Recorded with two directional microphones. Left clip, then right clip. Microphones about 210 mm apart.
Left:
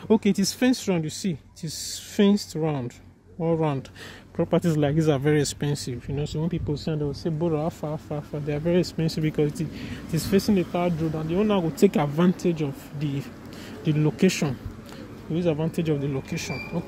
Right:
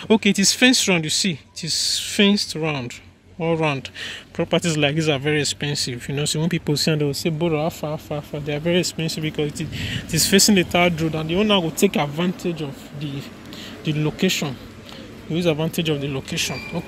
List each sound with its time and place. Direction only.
0.1 s speech: 5° left (ahead or behind)
6.0 s speech: 10° right (ahead or behind)
6.4 s speech: 20° right (ahead or behind); by 11.7 s centre (ahead or behind)
11.8 s speech: 15° left (ahead or behind)
15.3 s speech: 5° right (ahead or behind)
15.8 s speech: 5° left (ahead or behind)